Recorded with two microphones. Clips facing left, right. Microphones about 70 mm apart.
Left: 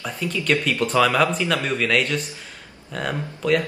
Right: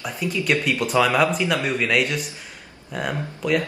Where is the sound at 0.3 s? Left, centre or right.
Centre.